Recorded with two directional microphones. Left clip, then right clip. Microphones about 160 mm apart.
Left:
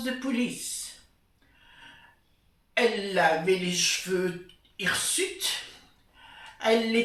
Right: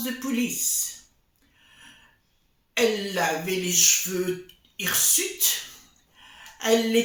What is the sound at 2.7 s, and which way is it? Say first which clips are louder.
Speech: right 1 dB; 15° right (ahead or behind).